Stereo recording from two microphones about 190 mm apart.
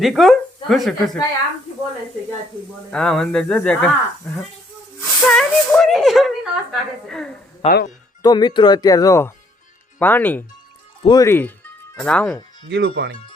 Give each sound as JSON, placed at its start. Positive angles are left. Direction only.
{"t": 0.0, "sound": "speech", "side_deg": 0}
{"t": 2.9, "sound": "speech", "side_deg": 5}
{"t": 4.9, "sound": "speech", "side_deg": 0}
{"t": 7.6, "sound": "speech", "side_deg": 30}
{"t": 8.2, "sound": "speech", "side_deg": 20}
{"t": 12.6, "sound": "speech", "side_deg": -65}